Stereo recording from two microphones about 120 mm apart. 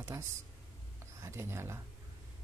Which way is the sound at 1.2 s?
20° right (ahead or behind).